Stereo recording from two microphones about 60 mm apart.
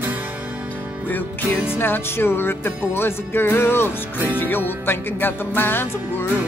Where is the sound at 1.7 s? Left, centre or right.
Left.